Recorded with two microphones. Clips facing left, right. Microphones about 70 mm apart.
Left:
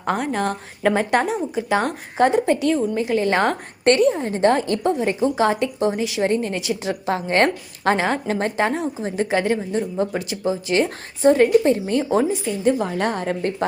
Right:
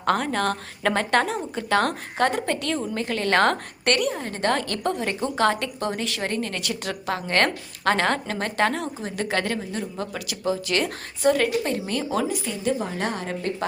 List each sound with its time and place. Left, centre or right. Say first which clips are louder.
0.0 s a woman's voice: left 1 dB; centre
3.8 s a woman's voice: left 7 dB; left; by 6.1 s centre
6.1 s a woman's voice: left 7 dB; left
7.9 s a woman's voice: left 2 dB; centre
8.3 s a woman's voice: left 3 dB; left
12.8 s a woman's voice: left 5 dB; left